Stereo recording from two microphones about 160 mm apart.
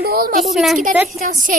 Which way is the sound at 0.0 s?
70° right (ahead or behind).